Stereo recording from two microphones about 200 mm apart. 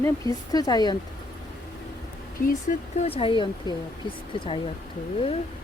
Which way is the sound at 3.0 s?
25° left (ahead or behind).